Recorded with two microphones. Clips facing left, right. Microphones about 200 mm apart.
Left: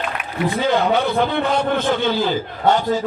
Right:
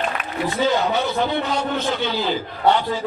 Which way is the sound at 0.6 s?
55° left (ahead or behind).